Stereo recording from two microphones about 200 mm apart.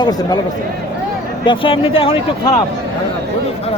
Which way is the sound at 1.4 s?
25° left (ahead or behind).